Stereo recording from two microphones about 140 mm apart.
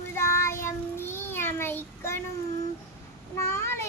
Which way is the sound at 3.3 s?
20° left (ahead or behind).